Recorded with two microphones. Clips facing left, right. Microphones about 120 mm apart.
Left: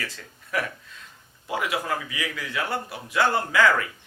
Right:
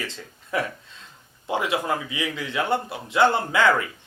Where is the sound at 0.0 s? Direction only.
20° right (ahead or behind).